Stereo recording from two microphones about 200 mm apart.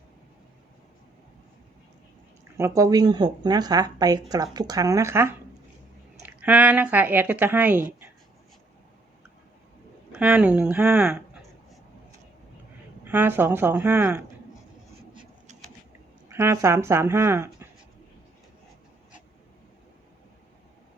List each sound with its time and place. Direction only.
2.6 s speech: 15° right (ahead or behind)
10.1 s speech: 5° right (ahead or behind)
13.1 s speech: 10° right (ahead or behind)
16.3 s speech: 15° right (ahead or behind)